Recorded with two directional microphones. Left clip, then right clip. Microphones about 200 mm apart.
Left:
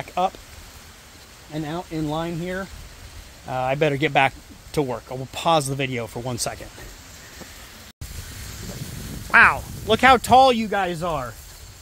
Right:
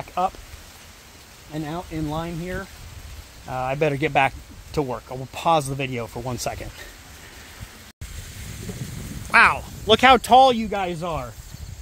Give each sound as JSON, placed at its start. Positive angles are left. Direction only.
{"t": 0.0, "sound": "a sound", "side_deg": 5}
{"t": 1.5, "sound": "speech", "side_deg": 0}
{"t": 9.3, "sound": "speech", "side_deg": -25}
{"t": 10.3, "sound": "speech", "side_deg": -10}